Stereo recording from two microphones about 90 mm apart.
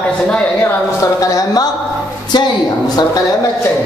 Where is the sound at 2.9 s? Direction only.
45° left (ahead or behind).